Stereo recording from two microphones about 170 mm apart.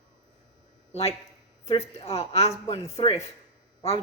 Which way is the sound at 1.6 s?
35° left (ahead or behind).